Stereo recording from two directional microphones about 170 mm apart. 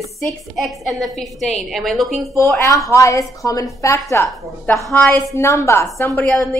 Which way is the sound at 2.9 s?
20° left (ahead or behind).